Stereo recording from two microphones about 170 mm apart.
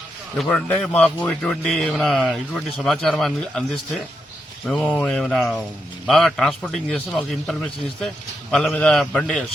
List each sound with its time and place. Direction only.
0.3 s a man's voice: 5° left (ahead or behind)